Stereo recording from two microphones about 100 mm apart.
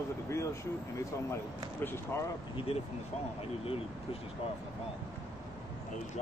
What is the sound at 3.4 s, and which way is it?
Speech, 70° left (ahead or behind).